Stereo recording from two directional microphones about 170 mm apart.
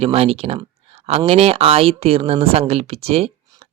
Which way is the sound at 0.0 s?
35° right (ahead or behind).